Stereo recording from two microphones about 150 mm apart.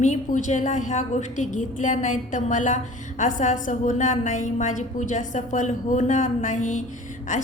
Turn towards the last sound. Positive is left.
turn(degrees=55)  # may be behind; listen again after turning